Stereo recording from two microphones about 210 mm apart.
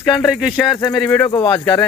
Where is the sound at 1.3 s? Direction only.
20° left (ahead or behind).